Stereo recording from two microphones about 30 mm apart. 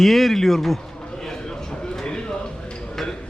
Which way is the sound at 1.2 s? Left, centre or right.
Centre.